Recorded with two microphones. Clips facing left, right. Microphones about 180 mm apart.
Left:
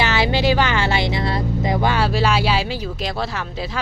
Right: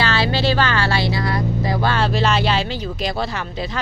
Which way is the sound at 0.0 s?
20° left (ahead or behind).